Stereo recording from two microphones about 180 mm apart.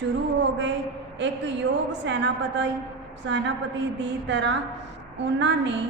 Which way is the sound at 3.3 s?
90° right.